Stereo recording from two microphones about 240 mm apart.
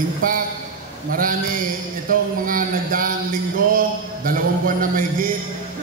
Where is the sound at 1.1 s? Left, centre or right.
Right.